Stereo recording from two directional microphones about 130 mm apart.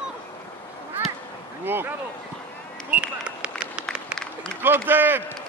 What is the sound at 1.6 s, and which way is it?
Speech, 15° right (ahead or behind).